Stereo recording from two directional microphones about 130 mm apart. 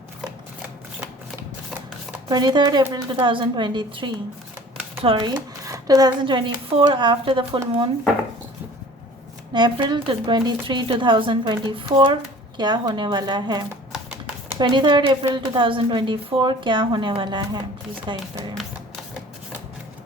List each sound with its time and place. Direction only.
2.3 s speech: 35° right (ahead or behind)
5.1 s speech: 30° right (ahead or behind)
9.5 s speech: 35° right (ahead or behind)